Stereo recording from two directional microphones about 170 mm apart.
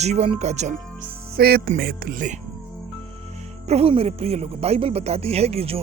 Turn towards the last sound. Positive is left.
turn(degrees=-35)  # may be behind; listen again after turning